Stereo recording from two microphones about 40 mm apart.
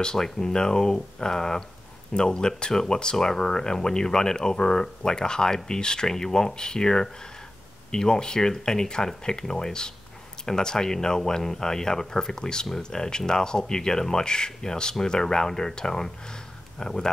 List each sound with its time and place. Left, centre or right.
0.0 s speech: centre